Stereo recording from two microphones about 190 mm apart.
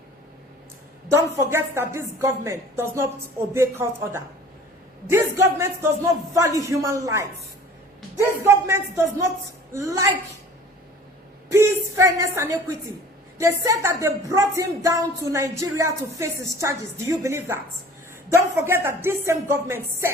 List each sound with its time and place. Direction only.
1.1 s a woman's voice: 15° right (ahead or behind)
11.5 s a woman's voice: 15° right (ahead or behind)